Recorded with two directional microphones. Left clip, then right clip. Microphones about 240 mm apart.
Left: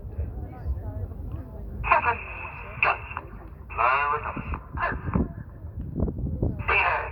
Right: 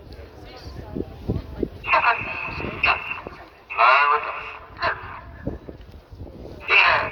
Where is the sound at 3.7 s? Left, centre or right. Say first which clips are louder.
Right 7 dB; right.